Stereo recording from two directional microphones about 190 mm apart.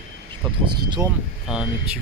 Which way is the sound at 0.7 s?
25° right (ahead or behind).